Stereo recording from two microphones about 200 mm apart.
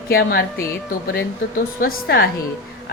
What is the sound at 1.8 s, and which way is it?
Speech, 45° left (ahead or behind).